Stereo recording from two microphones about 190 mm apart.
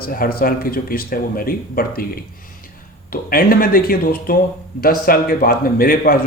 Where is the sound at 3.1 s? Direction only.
50° left (ahead or behind).